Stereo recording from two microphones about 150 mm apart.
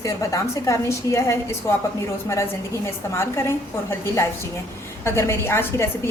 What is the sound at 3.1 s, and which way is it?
A woman's voice, 15° left (ahead or behind).